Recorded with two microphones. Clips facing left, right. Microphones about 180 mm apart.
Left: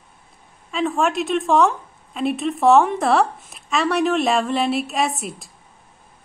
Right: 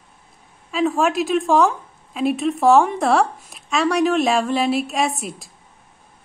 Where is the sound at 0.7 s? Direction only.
Centre (ahead or behind).